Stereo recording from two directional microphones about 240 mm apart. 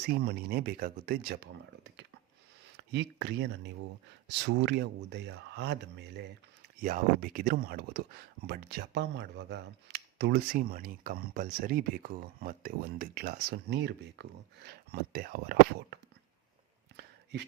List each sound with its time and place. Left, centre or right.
0.1 s speech: right